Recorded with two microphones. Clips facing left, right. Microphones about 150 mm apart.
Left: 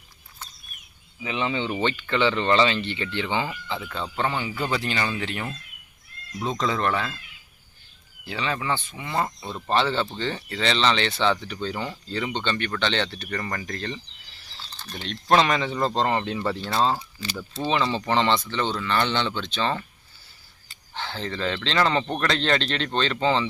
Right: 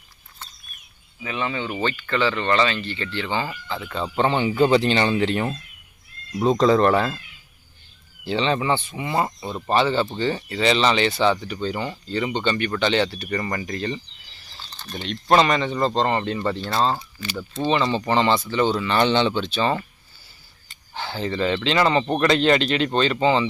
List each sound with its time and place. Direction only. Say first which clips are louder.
1.2 s speech: even; 20° left (ahead or behind)
4.0 s speech: right 8 dB; 20° right (ahead or behind); by 7.2 s 40° right (ahead or behind)
8.2 s speech: right 7 dB; 25° right (ahead or behind); by 19.8 s 10° right (ahead or behind)
20.9 s speech: right 4 dB; 5° right (ahead or behind)